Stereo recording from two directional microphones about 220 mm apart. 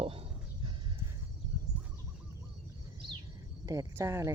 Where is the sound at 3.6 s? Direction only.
15° right (ahead or behind).